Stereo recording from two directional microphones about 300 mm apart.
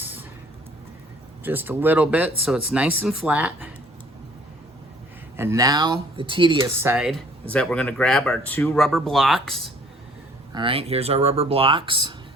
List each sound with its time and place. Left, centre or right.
0.0 s a sound: centre
1.5 s speech: centre
5.4 s speech: centre
10.5 s speech: centre